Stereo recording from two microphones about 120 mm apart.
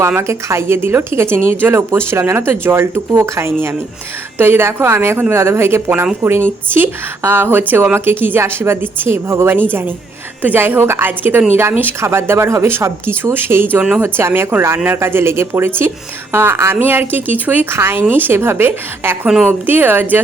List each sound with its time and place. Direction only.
0.2 s speech: 25° right (ahead or behind)
13.7 s speech: 10° right (ahead or behind)
14.0 s speech: 20° right (ahead or behind)